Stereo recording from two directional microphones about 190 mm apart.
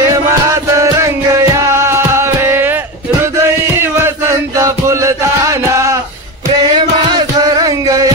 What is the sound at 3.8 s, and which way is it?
Music, 15° right (ahead or behind).